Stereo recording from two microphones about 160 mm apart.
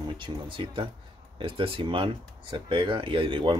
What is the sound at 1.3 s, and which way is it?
Speech, 35° right (ahead or behind).